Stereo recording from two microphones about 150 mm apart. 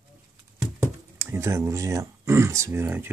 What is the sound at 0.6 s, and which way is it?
Speech, 15° right (ahead or behind).